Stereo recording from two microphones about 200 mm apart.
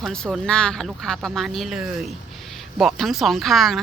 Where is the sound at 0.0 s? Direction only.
5° left (ahead or behind).